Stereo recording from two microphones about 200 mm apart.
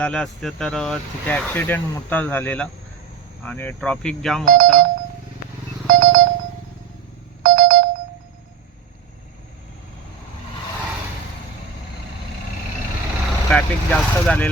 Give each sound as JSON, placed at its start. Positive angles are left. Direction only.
{"t": 0.0, "sound": "speech", "side_deg": 5}
{"t": 4.4, "sound": "speech", "side_deg": -45}
{"t": 5.9, "sound": "motorcycle", "side_deg": -45}
{"t": 7.4, "sound": "a sound", "side_deg": -45}
{"t": 13.5, "sound": "speech", "side_deg": 5}